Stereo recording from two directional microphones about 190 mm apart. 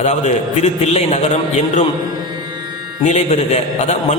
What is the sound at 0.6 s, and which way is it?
Speech, 35° left (ahead or behind).